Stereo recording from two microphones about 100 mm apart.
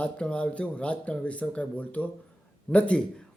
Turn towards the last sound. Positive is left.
turn(degrees=15)  # may be behind; listen again after turning